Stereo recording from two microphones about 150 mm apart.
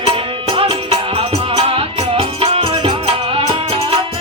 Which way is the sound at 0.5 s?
35° right (ahead or behind).